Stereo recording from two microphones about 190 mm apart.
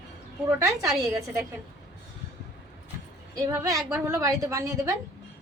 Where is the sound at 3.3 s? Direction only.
15° right (ahead or behind).